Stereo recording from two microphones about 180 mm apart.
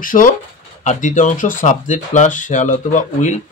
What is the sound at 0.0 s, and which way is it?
Speech, 50° left (ahead or behind).